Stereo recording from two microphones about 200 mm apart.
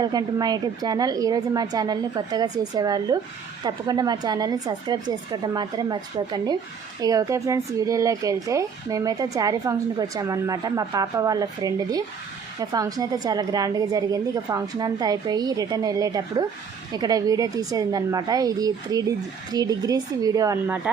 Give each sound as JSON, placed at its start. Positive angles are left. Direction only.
{"t": 0.0, "sound": "a woman's voice", "side_deg": -20}